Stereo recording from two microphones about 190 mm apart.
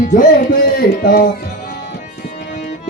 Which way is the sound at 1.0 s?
50° left (ahead or behind).